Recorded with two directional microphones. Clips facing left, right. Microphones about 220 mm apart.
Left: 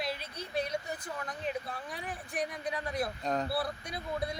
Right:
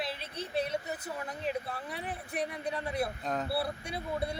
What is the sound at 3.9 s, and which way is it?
Speech, 30° right (ahead or behind).